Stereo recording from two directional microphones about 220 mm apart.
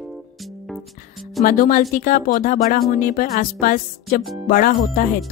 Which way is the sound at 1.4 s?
40° left (ahead or behind).